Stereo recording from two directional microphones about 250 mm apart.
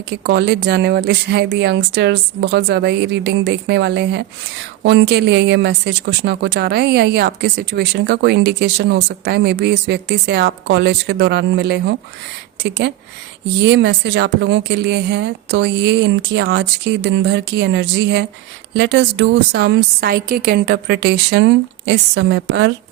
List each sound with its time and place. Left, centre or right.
0.1 s a woman's voice: right